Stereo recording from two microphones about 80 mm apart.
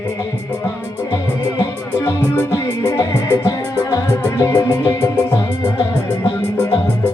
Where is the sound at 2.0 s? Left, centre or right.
Left.